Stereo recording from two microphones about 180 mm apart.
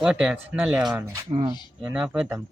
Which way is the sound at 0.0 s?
5° right (ahead or behind).